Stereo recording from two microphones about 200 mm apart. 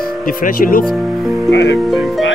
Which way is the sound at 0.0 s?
45° left (ahead or behind).